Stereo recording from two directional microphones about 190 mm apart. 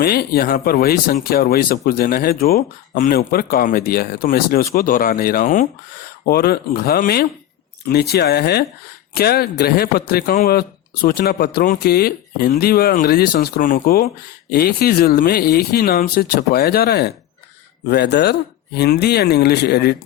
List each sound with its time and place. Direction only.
0.0 s speech: 55° left (ahead or behind)
6.2 s speech: 55° left (ahead or behind)